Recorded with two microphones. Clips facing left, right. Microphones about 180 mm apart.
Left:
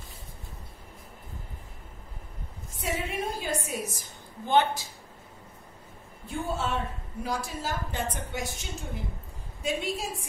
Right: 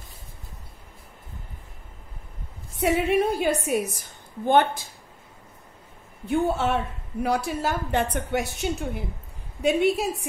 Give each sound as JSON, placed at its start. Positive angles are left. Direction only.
{"t": 2.8, "sound": "a woman's voice", "side_deg": -65}
{"t": 6.2, "sound": "a woman's voice", "side_deg": -65}